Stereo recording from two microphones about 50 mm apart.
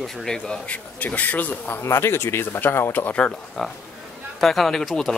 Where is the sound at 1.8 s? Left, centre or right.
Left.